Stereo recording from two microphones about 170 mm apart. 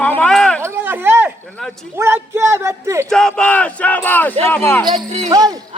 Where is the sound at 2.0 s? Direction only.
15° right (ahead or behind).